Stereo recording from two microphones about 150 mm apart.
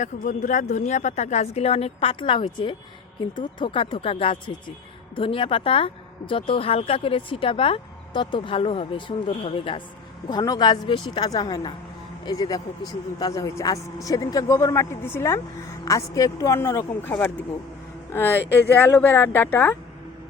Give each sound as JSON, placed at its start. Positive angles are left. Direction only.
{"t": 0.0, "sound": "a woman's voice", "side_deg": 55}
{"t": 10.2, "sound": "speech", "side_deg": 25}